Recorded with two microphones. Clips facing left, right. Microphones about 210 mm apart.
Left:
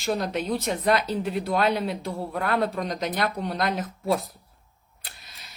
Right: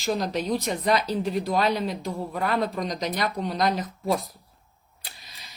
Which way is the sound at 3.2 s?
55° left (ahead or behind).